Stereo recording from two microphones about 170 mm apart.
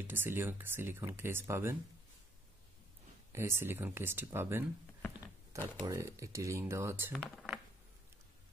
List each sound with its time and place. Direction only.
0.0 s speech: 10° right (ahead or behind)
3.3 s speech: 15° right (ahead or behind)
5.8 s speech: 20° right (ahead or behind)
7.1 s a sound: 5° left (ahead or behind)